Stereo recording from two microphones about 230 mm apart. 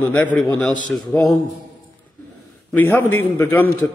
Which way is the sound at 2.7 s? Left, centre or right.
Centre.